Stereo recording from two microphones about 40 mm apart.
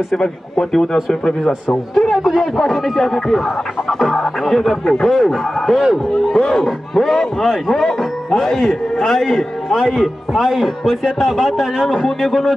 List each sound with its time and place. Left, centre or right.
0.2 s speech: centre
2.0 s a man's voice: centre
5.8 s a man's voice: centre
6.3 s a man's voice: centre
6.6 s a man's voice: centre
8.4 s a man's voice: centre
10.3 s a man's voice: centre
12.2 s a man's voice: centre